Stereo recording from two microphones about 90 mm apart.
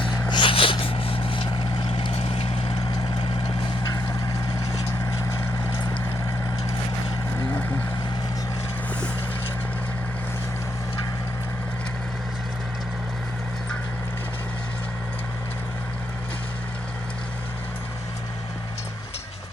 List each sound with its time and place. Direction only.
0.0 s vehicle: 60° left (ahead or behind); by 2.8 s 90° left
7.3 s vehicle: 20° left (ahead or behind)